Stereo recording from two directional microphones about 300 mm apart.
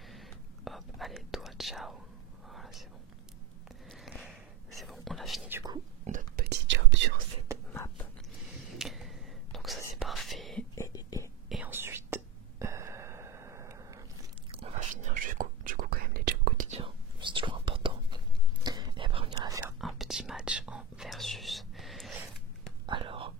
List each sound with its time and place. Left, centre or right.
0.1 s whispering: centre
3.9 s a sound: centre
4.8 s whispering: centre
6.0 s whispering: right
7.7 s a sound: centre
8.7 s whispering: centre
10.7 s whispering: centre
11.4 s whispering: centre
14.5 s whispering: right
19.8 s whispering: centre
22.8 s whispering: centre